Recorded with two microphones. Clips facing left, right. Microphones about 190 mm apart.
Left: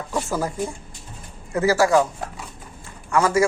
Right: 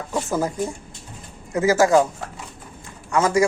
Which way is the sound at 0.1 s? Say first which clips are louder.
Right 2 dB; 15° right (ahead or behind).